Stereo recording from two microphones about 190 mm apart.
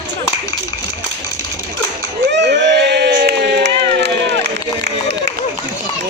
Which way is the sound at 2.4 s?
65° right (ahead or behind).